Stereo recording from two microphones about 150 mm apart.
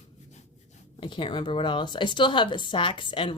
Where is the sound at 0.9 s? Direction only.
30° left (ahead or behind).